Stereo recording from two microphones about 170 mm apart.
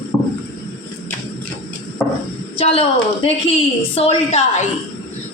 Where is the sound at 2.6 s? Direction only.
35° left (ahead or behind).